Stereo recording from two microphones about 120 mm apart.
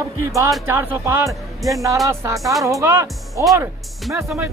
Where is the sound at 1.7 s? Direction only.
25° right (ahead or behind).